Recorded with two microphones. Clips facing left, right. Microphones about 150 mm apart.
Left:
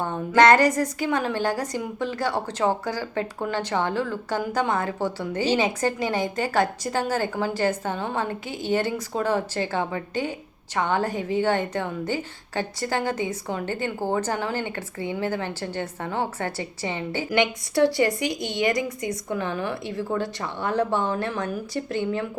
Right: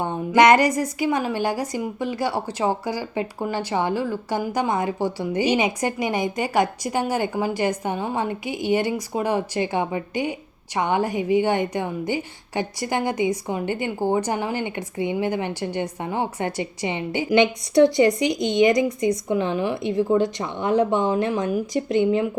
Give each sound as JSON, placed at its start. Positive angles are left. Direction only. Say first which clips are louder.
{"t": 0.0, "sound": "a woman's voice", "louder": "right 2 dB", "side_deg": -15}